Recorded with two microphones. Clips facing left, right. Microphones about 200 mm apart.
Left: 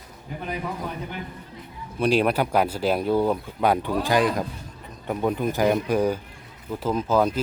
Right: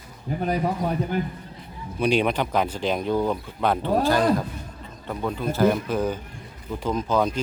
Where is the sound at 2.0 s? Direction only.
Centre (ahead or behind).